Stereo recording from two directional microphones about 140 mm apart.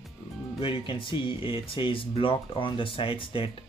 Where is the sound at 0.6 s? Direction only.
40° left (ahead or behind).